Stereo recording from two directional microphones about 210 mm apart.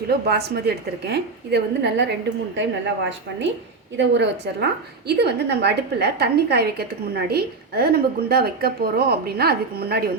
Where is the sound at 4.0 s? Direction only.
55° right (ahead or behind).